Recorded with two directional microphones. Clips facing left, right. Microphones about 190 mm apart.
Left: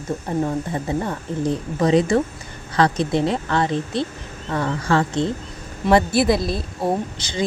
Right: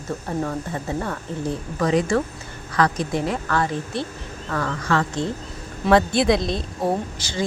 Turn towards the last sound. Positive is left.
turn(degrees=20)  # may be behind; listen again after turning